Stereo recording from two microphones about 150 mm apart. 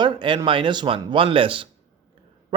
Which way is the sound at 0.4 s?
35° right (ahead or behind).